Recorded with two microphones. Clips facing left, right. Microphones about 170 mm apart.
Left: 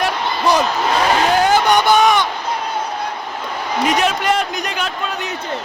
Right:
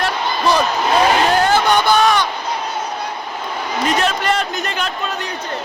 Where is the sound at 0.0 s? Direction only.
20° left (ahead or behind).